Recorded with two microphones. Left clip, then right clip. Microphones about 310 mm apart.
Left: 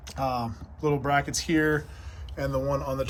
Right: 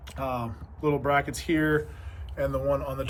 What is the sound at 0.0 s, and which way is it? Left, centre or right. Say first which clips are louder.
A man's voice: left 3 dB; centre.